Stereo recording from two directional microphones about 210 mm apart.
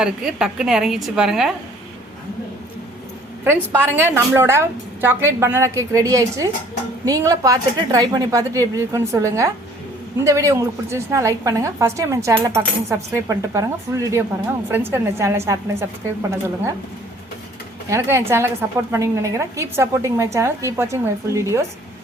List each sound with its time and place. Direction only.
0.0 s a woman's voice: 5° right (ahead or behind)
3.4 s a woman's voice: 10° right (ahead or behind)
17.8 s a woman's voice: 15° right (ahead or behind)